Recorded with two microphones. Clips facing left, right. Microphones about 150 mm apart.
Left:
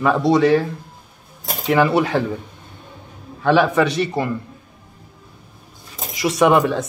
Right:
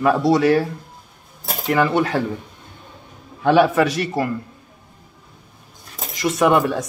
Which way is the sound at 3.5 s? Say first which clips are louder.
Right 1 dB; 10° right (ahead or behind).